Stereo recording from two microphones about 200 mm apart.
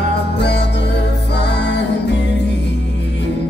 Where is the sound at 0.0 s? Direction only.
60° left (ahead or behind).